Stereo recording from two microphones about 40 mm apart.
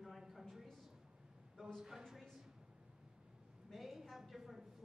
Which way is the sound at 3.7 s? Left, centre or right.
Centre.